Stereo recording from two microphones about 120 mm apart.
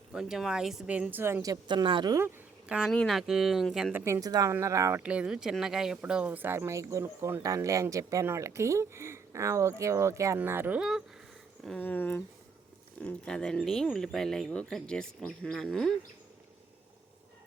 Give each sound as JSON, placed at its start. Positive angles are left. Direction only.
{"t": 0.1, "sound": "a woman's voice", "side_deg": -5}
{"t": 2.6, "sound": "speech", "side_deg": -10}
{"t": 2.9, "sound": "speech", "side_deg": 5}
{"t": 3.9, "sound": "speech", "side_deg": -20}
{"t": 5.0, "sound": "speech", "side_deg": -10}
{"t": 10.8, "sound": "speech", "side_deg": -5}
{"t": 11.8, "sound": "speech", "side_deg": 15}